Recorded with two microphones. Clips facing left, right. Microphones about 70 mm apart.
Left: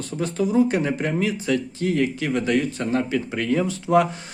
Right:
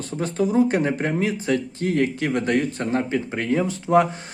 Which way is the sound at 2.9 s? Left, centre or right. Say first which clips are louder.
Left 1 dB; right.